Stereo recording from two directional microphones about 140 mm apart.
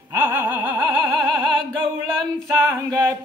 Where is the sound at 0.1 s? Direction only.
15° right (ahead or behind).